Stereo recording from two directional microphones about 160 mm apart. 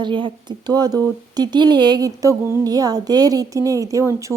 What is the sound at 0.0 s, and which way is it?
Speech, 30° right (ahead or behind).